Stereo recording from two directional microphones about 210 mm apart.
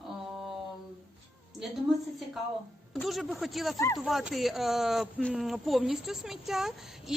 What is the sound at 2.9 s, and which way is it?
Speech, centre (ahead or behind).